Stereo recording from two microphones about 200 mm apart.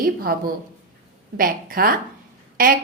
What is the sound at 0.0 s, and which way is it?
A woman's voice, 45° right (ahead or behind).